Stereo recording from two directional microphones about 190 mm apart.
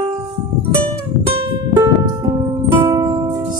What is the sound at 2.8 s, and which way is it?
Music, 15° right (ahead or behind).